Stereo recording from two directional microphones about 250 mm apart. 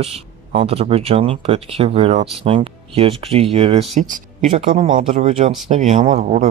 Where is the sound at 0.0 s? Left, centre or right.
Right.